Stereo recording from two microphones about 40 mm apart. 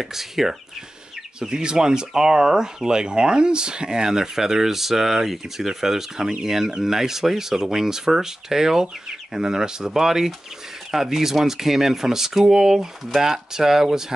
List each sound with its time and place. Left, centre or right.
0.0 s speech: centre
1.4 s speech: right; by 13.2 s centre
13.2 s speech: centre